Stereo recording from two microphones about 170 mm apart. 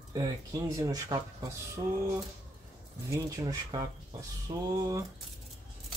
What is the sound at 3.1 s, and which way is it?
Speech, 20° right (ahead or behind).